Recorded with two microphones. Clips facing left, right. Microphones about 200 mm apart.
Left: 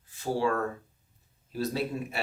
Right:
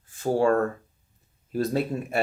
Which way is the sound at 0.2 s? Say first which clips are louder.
Right 6 dB; 50° right (ahead or behind).